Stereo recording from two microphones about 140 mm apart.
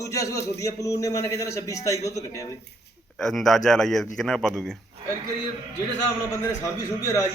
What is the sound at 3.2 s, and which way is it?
A man's voice, centre (ahead or behind).